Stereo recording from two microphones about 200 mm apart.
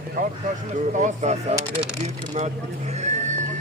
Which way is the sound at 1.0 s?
35° right (ahead or behind).